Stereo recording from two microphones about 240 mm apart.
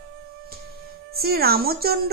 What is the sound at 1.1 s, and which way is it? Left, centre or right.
Speech, right.